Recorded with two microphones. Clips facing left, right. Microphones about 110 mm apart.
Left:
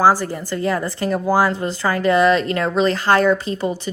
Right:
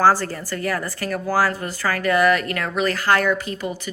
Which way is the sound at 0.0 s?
15° left (ahead or behind).